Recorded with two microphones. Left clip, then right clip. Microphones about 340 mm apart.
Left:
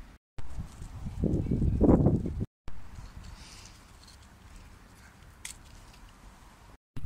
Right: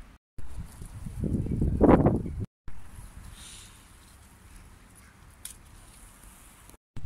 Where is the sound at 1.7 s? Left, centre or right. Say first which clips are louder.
Right 5 dB; right.